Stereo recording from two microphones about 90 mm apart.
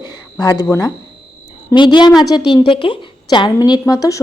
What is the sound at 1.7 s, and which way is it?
A woman's voice, 55° left (ahead or behind).